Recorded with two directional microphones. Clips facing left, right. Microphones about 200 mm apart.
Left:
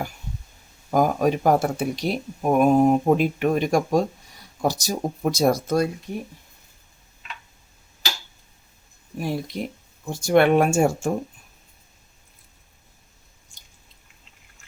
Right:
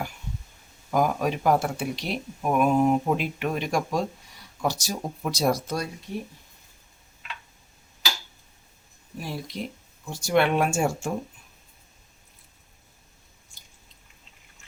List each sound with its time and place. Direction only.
0.9 s speech: 45° left (ahead or behind)
9.1 s speech: 55° left (ahead or behind)